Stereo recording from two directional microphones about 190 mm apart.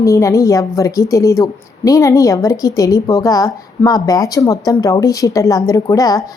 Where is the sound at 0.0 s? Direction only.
15° left (ahead or behind).